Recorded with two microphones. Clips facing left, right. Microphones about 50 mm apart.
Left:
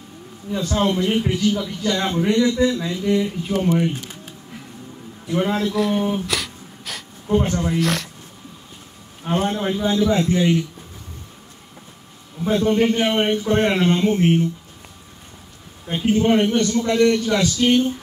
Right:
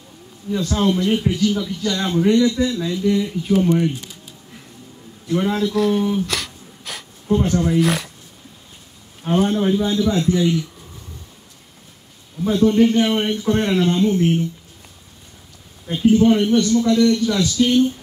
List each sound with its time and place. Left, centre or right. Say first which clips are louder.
0.5 s speech: right 1 dB; centre
3.9 s a sound: left 1 dB; left
5.3 s speech: right 1 dB; centre
6.2 s a sound: left 1 dB; centre
7.2 s speech: right 1 dB; centre
7.5 s speech: right 4 dB; centre
7.8 s speech: right 3 dB; centre
9.5 s a man's voice: right 3 dB; centre
12.4 s a man's voice: right 2 dB; left
15.9 s a man's voice: right 3 dB; left